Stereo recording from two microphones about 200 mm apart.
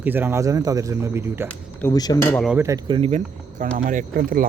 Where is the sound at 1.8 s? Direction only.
15° left (ahead or behind).